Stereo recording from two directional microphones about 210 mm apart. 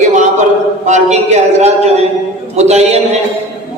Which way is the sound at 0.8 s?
35° right (ahead or behind).